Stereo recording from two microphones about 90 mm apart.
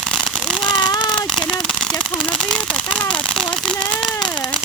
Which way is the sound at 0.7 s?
55° left (ahead or behind).